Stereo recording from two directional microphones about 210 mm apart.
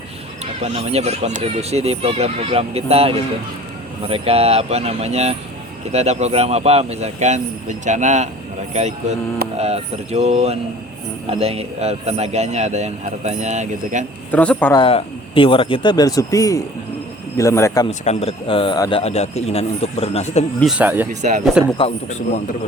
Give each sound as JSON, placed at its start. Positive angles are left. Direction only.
{"t": 0.6, "sound": "a man's voice", "side_deg": -30}
{"t": 14.3, "sound": "speech", "side_deg": 5}
{"t": 14.8, "sound": "a man's voice", "side_deg": 25}
{"t": 17.8, "sound": "a man's voice", "side_deg": 30}
{"t": 20.6, "sound": "speech", "side_deg": -5}
{"t": 21.1, "sound": "a man's voice", "side_deg": -35}
{"t": 21.8, "sound": "a man's voice", "side_deg": 30}